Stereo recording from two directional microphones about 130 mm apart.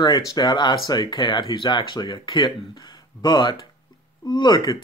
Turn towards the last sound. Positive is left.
turn(degrees=30)  # may be behind; listen again after turning